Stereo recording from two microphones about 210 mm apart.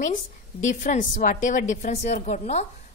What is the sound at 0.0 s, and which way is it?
A woman's voice, 35° left (ahead or behind).